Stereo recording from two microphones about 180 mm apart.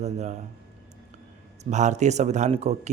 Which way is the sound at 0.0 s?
40° right (ahead or behind).